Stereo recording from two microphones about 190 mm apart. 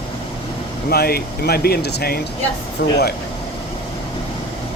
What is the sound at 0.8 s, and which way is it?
Speech, 55° left (ahead or behind).